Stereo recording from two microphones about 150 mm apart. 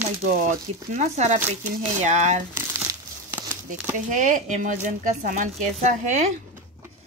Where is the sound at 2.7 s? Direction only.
20° right (ahead or behind).